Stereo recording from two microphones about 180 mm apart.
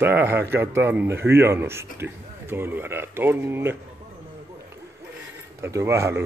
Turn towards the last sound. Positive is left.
turn(degrees=-15)  # may be behind; listen again after turning